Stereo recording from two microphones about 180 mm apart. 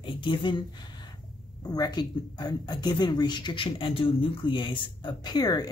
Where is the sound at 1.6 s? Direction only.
20° left (ahead or behind).